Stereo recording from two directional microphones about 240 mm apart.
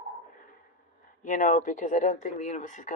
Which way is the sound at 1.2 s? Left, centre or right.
Left.